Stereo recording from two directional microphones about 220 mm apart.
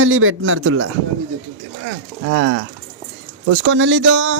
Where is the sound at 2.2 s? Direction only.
60° right (ahead or behind).